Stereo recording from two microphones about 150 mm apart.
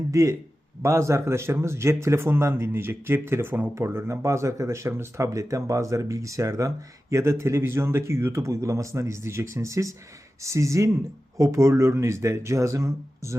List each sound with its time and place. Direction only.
0.1 s a man's voice: 20° right (ahead or behind)